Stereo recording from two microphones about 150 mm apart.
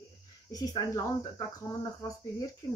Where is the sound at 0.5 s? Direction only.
25° left (ahead or behind).